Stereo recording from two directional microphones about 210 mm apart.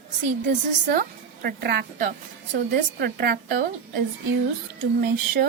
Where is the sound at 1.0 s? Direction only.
45° right (ahead or behind).